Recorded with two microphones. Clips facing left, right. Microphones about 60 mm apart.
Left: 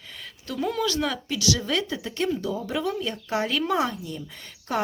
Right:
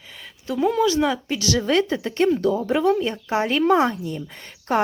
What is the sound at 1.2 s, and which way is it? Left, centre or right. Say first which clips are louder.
Speech: right 4 dB; right.